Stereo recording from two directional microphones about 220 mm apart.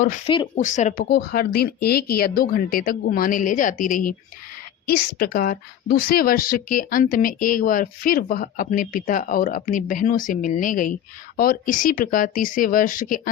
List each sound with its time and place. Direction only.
0.5 s a woman's voice: 35° left (ahead or behind)